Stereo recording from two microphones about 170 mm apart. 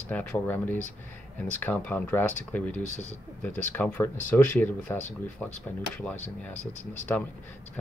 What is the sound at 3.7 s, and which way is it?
Speech, 10° left (ahead or behind).